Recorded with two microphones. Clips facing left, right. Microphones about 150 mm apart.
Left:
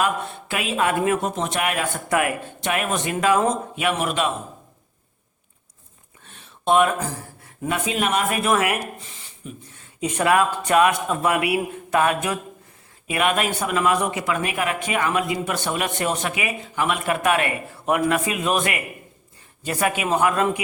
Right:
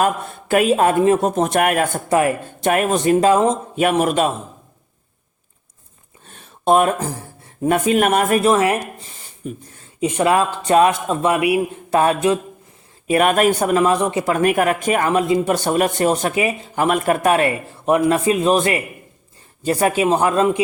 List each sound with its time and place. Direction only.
0.0 s a man's voice: 45° right (ahead or behind)
1.4 s speech: 45° right (ahead or behind)
2.0 s a man's voice: 30° right (ahead or behind)
2.6 s a man's voice: 45° right (ahead or behind)
3.8 s speech: 40° right (ahead or behind)
6.2 s a sound: 45° right (ahead or behind)
7.7 s speech: 50° right (ahead or behind)
8.4 s speech: 30° right (ahead or behind)
10.0 s a man's voice: 25° right (ahead or behind)
13.1 s a man's voice: 40° right (ahead or behind)
14.3 s a man's voice: 45° right (ahead or behind); by 20.6 s 25° right (ahead or behind)